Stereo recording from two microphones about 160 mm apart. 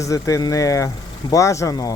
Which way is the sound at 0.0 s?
20° left (ahead or behind).